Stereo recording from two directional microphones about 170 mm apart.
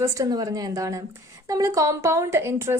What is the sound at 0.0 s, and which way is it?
A woman's voice, 20° right (ahead or behind).